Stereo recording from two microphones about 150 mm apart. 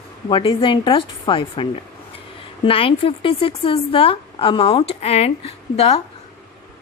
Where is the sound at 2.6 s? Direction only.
35° left (ahead or behind).